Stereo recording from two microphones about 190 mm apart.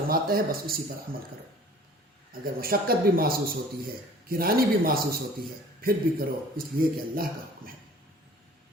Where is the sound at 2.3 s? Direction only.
50° right (ahead or behind).